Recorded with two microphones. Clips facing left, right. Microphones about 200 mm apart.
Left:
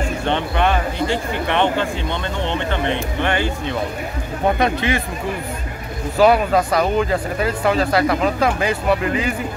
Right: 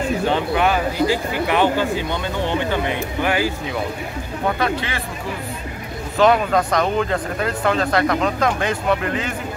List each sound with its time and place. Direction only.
0.2 s speech: 5° right (ahead or behind)
4.6 s speech: 20° left (ahead or behind)
6.1 s speech: 5° left (ahead or behind)